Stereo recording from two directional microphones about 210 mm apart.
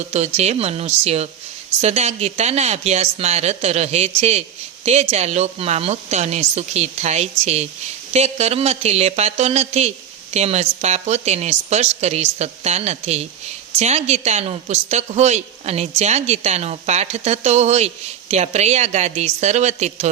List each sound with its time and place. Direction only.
0.3 s a woman's voice: 30° right (ahead or behind)